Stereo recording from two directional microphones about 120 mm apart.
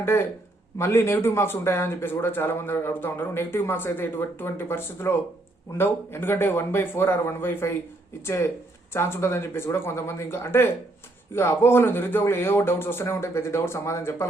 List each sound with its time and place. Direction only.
0.0 s a man's voice: 20° left (ahead or behind)